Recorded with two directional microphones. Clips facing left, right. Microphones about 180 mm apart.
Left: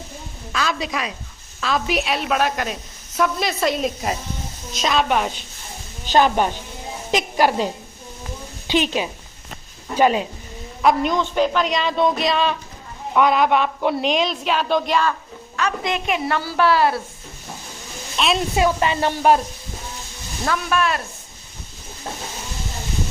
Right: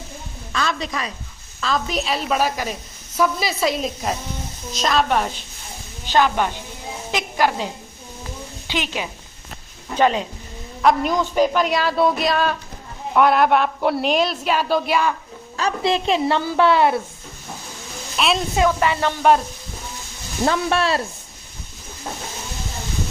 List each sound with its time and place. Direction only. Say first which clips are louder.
0.5 s a woman's voice: even; 5° left (ahead or behind)
6.1 s a woman's voice: left 2 dB; 15° left (ahead or behind)
9.9 s a woman's voice: left 1 dB; 10° left (ahead or behind)
10.8 s a woman's voice: even; 5° right (ahead or behind)
15.5 s a woman's voice: right 3 dB; 30° right (ahead or behind)
18.2 s a woman's voice: even; 5° right (ahead or behind)
18.5 s speech: right 1 dB; 20° left (ahead or behind)
20.4 s speech: right 2 dB; 30° right (ahead or behind)